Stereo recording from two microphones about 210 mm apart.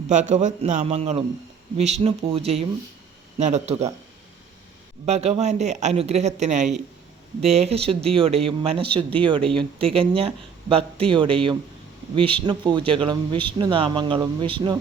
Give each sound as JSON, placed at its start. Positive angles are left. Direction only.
{"t": 0.1, "sound": "speech", "side_deg": -35}
{"t": 5.0, "sound": "speech", "side_deg": -30}